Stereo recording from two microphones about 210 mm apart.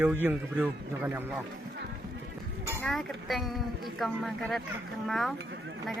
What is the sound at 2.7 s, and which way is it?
Speech, centre (ahead or behind).